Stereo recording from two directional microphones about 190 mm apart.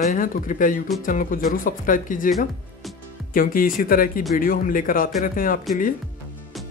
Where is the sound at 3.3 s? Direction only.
50° left (ahead or behind).